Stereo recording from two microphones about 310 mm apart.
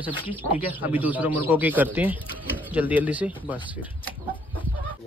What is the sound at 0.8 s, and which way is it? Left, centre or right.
Speech, centre.